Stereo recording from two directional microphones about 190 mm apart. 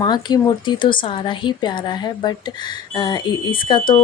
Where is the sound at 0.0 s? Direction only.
20° left (ahead or behind).